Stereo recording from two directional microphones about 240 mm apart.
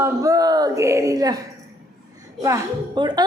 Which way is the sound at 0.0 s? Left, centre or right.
Centre.